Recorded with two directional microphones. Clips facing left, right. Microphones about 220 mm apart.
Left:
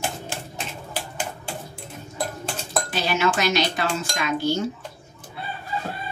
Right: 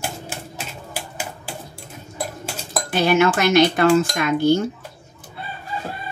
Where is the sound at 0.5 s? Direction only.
5° right (ahead or behind).